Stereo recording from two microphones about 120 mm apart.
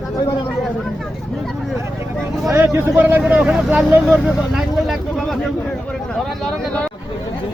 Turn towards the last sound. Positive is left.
turn(degrees=5)  # may be behind; listen again after turning